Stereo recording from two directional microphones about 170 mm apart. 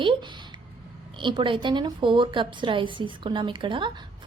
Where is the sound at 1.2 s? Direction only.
30° right (ahead or behind).